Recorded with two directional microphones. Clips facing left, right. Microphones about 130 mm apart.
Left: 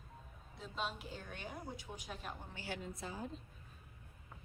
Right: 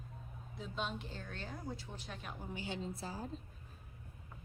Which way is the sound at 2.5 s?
20° right (ahead or behind).